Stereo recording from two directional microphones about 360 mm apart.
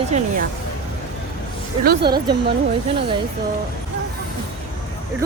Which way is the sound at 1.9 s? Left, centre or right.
Right.